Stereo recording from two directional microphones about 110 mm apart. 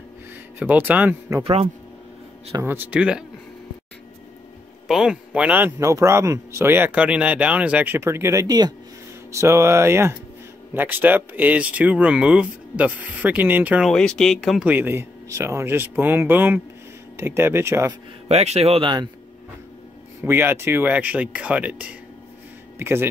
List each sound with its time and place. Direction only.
0.6 s speech: 15° right (ahead or behind)
1.4 s speech: 65° right (ahead or behind)
2.6 s speech: 20° right (ahead or behind)
4.8 s speech: 5° right (ahead or behind)
5.8 s speech: 25° right (ahead or behind)
9.3 s speech: 25° right (ahead or behind)
13.8 s speech: 5° left (ahead or behind)
14.6 s speech: 15° right (ahead or behind)
18.3 s speech: 75° right (ahead or behind)
20.2 s speech: 20° right (ahead or behind)